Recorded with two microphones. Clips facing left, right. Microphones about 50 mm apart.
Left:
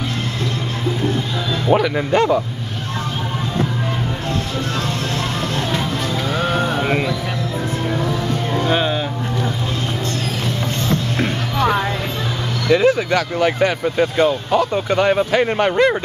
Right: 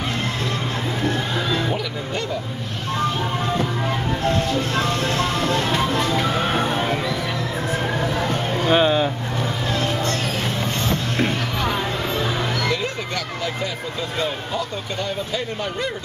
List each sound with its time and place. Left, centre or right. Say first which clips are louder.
1.7 s speech: left 10 dB; left
5.8 s music: right 1 dB; right
8.5 s music: right 2 dB; centre
12.7 s speech: left 11 dB; left